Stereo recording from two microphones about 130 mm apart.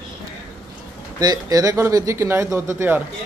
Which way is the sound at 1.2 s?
30° right (ahead or behind).